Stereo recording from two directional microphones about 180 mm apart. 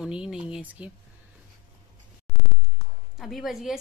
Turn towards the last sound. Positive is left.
turn(degrees=0)  # may be behind; listen again after turning